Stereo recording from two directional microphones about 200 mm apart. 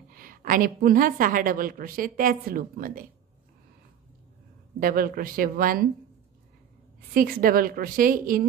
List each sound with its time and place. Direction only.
0.1 s a woman's voice: 45° right (ahead or behind)
4.7 s a woman's voice: 45° right (ahead or behind)
7.2 s a woman's voice: 45° right (ahead or behind)